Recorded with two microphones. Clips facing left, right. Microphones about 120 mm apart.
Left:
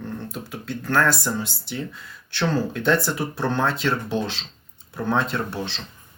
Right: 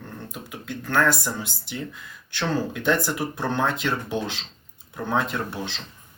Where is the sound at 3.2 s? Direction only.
5° right (ahead or behind).